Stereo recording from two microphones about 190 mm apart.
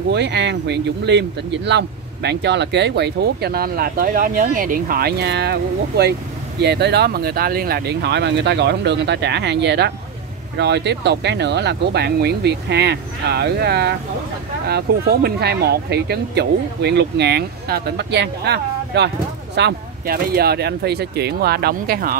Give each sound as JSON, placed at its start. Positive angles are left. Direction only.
{"t": 0.1, "sound": "speech", "side_deg": -65}